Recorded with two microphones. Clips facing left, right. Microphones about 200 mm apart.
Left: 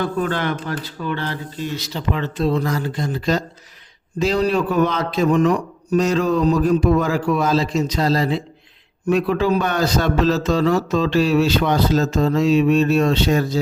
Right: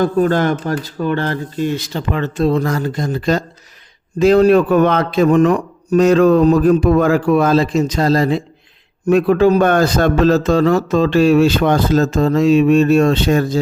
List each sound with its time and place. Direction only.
0.0 s a man's voice: 45° right (ahead or behind)